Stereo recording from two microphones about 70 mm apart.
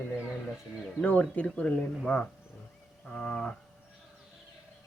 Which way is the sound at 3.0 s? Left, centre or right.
Centre.